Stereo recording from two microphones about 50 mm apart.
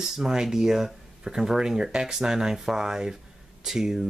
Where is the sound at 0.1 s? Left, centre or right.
Centre.